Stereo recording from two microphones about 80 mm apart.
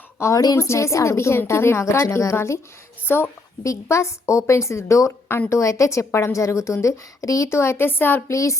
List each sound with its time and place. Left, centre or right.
0.2 s a woman's voice: left
3.6 s a woman's voice: left
8.3 s a woman's voice: left